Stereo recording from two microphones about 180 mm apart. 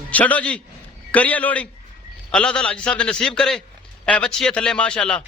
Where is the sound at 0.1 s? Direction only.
10° left (ahead or behind).